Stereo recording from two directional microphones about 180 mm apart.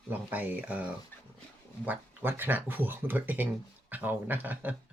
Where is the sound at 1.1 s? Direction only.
10° left (ahead or behind).